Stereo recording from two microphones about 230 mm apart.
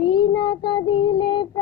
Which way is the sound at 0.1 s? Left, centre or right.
Centre.